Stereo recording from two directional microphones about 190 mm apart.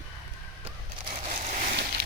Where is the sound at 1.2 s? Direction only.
35° right (ahead or behind).